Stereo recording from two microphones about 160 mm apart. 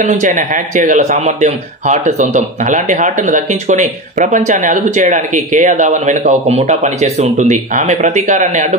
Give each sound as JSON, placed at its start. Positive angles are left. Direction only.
{"t": 0.0, "sound": "speech", "side_deg": -50}